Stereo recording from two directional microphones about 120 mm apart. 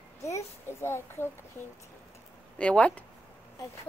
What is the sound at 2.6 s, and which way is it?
Speech, 10° left (ahead or behind).